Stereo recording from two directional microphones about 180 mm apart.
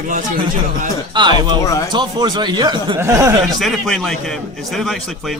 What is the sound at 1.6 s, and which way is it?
Speech, 15° left (ahead or behind).